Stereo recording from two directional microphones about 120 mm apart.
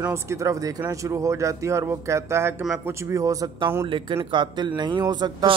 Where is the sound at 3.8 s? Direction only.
45° right (ahead or behind).